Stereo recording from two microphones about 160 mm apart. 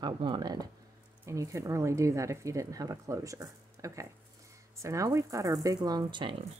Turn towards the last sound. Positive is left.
turn(degrees=-30)  # may be behind; listen again after turning